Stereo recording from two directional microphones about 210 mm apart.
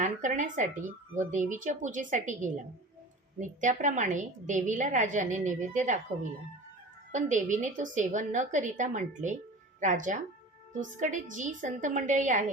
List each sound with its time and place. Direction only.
0.0 s a woman's voice: 35° right (ahead or behind)